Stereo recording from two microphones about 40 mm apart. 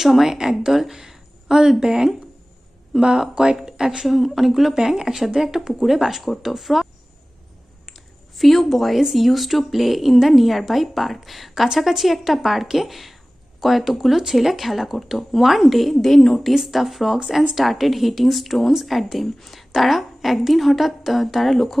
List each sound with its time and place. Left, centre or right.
0.0 s speech: centre
3.2 s speech: centre
4.2 s speech: centre
4.7 s speech: centre
8.4 s speech: centre
16.5 s speech: centre